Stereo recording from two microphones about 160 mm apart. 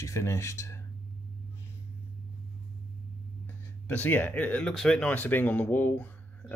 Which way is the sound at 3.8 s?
10° left (ahead or behind).